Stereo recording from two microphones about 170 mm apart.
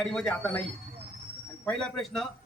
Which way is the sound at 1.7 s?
5° left (ahead or behind).